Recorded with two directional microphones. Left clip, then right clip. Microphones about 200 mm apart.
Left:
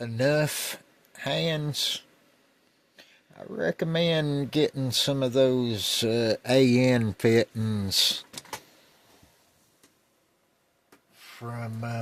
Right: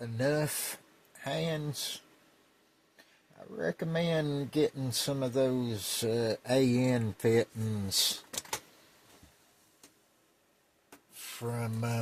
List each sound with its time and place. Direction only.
0.0 s speech: 55° left (ahead or behind)
11.2 s speech: centre (ahead or behind)